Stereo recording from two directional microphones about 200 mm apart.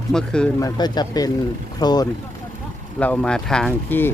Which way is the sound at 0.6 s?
20° left (ahead or behind).